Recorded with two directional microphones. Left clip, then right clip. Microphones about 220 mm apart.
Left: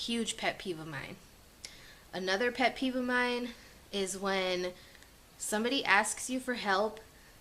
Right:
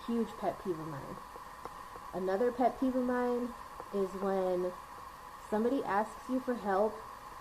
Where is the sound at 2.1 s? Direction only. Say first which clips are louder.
Even; 35° left (ahead or behind).